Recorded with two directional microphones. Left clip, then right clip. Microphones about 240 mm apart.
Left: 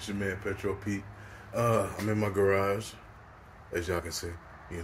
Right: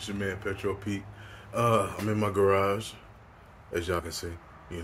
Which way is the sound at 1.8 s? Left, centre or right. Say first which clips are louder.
Right 1 dB; centre.